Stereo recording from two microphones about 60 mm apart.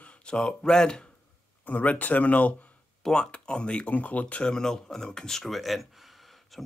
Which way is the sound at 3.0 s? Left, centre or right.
Centre.